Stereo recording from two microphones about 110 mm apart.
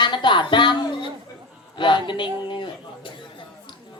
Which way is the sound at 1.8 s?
45° left (ahead or behind).